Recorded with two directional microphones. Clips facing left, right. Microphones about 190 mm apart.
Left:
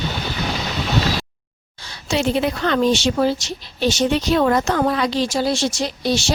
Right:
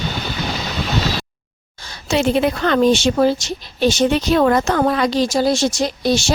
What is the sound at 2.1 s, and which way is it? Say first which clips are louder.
A woman's voice: right 3 dB; 55° right (ahead or behind).